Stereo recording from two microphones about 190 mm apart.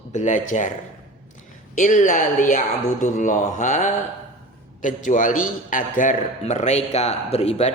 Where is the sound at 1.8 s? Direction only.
40° left (ahead or behind).